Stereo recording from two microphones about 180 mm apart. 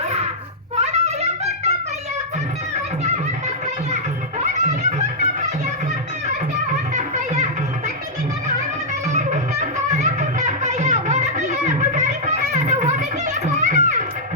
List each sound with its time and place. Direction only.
0.8 s a sound: 35° right (ahead or behind)
3.9 s music: 40° right (ahead or behind)
9.0 s music: 40° right (ahead or behind)